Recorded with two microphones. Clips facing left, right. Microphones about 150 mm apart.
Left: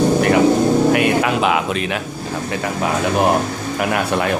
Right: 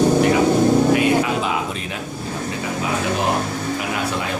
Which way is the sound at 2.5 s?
55° left (ahead or behind).